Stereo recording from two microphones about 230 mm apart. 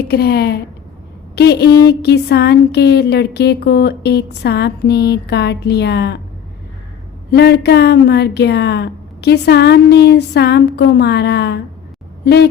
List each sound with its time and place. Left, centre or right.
0.1 s speech: left
7.3 s speech: left